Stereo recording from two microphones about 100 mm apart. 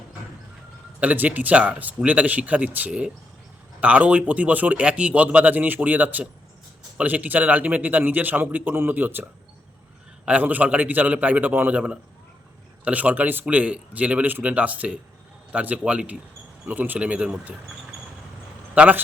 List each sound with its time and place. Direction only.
0.9 s a man's voice: 15° right (ahead or behind)
10.2 s a man's voice: 15° right (ahead or behind)
18.7 s a man's voice: 15° right (ahead or behind)